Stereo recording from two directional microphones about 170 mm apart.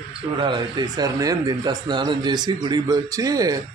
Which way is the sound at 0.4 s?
25° right (ahead or behind).